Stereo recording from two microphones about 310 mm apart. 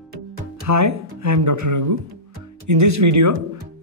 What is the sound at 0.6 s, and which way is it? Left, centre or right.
Speech, right.